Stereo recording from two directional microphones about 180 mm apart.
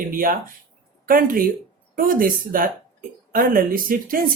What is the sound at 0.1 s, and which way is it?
Speech, 50° right (ahead or behind).